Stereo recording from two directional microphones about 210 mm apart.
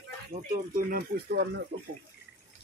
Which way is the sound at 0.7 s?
45° right (ahead or behind).